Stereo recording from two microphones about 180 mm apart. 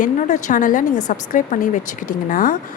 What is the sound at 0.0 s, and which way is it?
Speech, 45° left (ahead or behind).